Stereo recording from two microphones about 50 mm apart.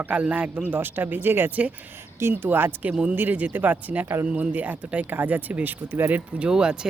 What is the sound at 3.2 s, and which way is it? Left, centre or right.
A man's voice, right.